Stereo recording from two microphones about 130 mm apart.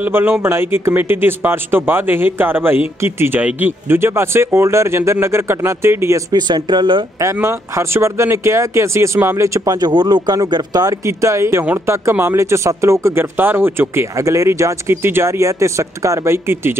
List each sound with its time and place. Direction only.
0.0 s speech: 15° right (ahead or behind); by 7.1 s 35° right (ahead or behind)
7.3 s speech: 20° right (ahead or behind)